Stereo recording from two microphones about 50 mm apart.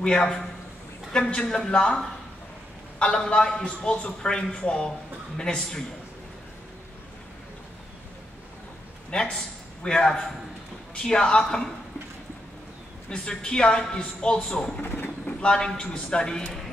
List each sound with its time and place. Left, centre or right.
0.0 s a woman's voice: centre
3.0 s a man's voice: centre
9.1 s a woman's voice: centre
13.1 s a woman's voice: centre